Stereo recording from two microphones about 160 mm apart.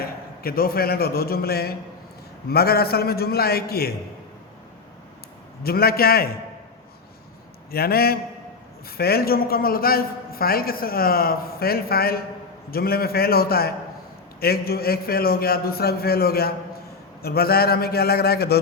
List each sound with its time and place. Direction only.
0.0 s a man's voice: 70° left (ahead or behind)
5.6 s a man's voice: 75° left (ahead or behind)
7.7 s a man's voice: 75° left (ahead or behind)